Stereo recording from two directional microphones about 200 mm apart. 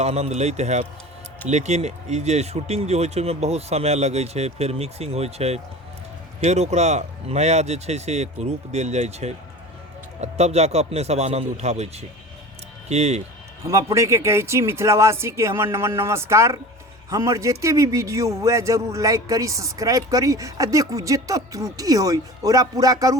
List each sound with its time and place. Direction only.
0.0 s speech: 30° right (ahead or behind)
13.7 s a man's voice: 15° right (ahead or behind)